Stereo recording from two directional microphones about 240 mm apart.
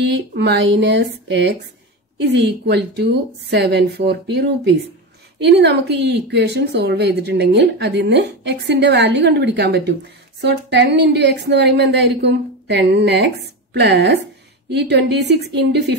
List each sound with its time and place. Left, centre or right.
0.0 s a woman's voice: right